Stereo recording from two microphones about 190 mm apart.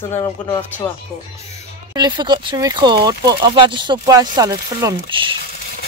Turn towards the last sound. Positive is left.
turn(degrees=-25)  # may be behind; listen again after turning